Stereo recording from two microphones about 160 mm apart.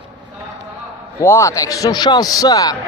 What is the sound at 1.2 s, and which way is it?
A man's voice, 20° left (ahead or behind).